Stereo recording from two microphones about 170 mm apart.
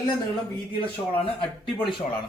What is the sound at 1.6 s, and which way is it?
Speech, centre (ahead or behind).